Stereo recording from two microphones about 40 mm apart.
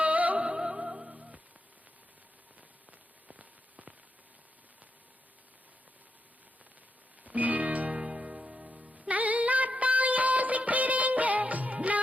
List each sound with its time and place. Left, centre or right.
0.0 s music: right
0.5 s music: right
3.2 s firecracker: right
7.3 s music: right
8.0 s music: right
9.0 s music: right